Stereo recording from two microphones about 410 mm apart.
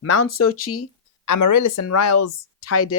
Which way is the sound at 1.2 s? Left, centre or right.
Left.